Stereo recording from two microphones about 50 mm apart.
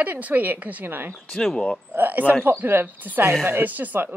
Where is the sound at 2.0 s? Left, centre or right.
Right.